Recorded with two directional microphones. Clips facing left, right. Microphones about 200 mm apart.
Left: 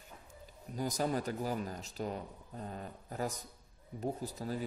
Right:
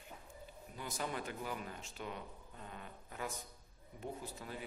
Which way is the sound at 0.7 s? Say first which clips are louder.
Left 8 dB; 40° left (ahead or behind).